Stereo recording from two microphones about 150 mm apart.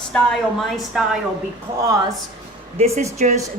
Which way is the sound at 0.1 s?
Centre (ahead or behind).